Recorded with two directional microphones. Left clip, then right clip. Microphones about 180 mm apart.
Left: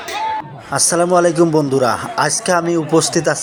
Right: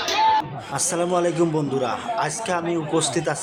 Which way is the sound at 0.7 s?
25° left (ahead or behind).